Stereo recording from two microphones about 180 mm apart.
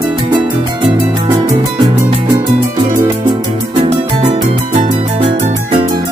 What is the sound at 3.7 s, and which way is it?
Music, 35° right (ahead or behind).